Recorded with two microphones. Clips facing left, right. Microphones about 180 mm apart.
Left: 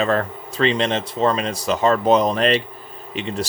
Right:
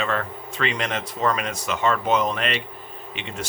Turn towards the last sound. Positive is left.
turn(degrees=35)  # may be behind; listen again after turning